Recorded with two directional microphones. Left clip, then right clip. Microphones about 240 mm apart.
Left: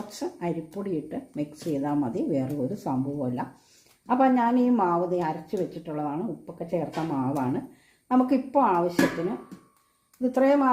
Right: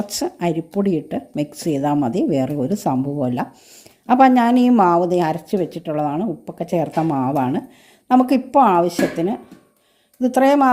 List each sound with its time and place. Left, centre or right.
0.2 s a woman's voice: right
10.2 s a woman's voice: right